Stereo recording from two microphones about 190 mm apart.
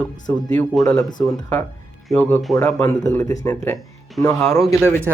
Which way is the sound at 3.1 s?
15° left (ahead or behind).